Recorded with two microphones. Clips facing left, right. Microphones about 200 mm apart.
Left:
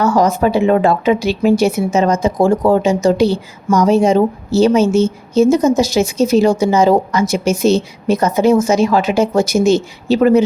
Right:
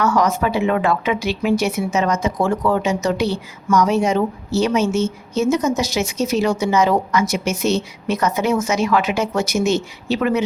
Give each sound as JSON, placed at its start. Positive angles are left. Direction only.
{"t": 0.0, "sound": "speech", "side_deg": 30}